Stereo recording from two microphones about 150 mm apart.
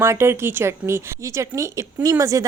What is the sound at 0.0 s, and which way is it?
A woman's voice, 15° right (ahead or behind).